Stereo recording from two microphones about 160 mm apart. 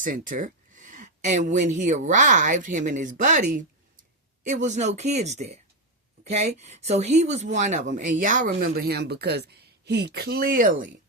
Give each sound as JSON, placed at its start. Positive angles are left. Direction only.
{"t": 0.0, "sound": "speech", "side_deg": -55}